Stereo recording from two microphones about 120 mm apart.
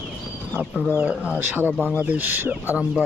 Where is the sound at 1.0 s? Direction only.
10° right (ahead or behind).